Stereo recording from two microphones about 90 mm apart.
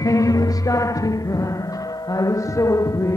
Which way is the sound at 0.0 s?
40° left (ahead or behind).